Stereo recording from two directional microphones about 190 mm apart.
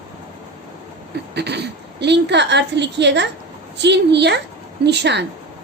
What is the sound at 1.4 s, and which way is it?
A woman's voice, 60° right (ahead or behind).